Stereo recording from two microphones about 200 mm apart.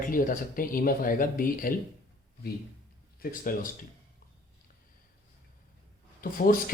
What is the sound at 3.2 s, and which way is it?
Speech, 45° left (ahead or behind).